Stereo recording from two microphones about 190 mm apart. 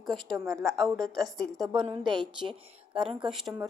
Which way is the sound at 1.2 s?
Centre (ahead or behind).